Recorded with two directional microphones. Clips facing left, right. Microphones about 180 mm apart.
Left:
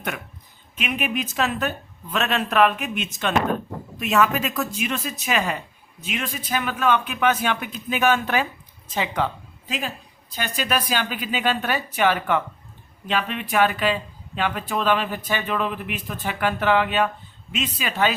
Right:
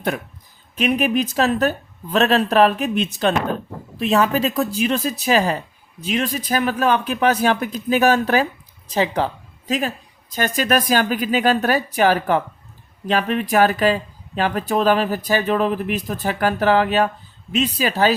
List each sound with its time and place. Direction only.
0.8 s speech: 35° right (ahead or behind)